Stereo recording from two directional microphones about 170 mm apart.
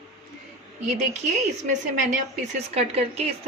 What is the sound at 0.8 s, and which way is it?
A woman's voice, 40° right (ahead or behind).